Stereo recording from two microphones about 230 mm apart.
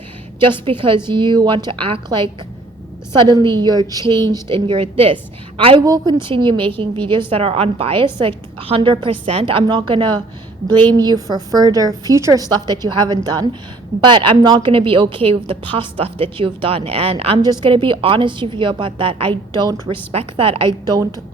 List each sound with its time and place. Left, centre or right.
0.4 s a woman's voice: right
4.0 s speech: centre
4.3 s a woman's voice: right